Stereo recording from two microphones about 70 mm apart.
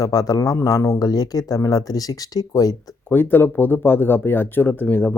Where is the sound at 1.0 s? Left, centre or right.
Left.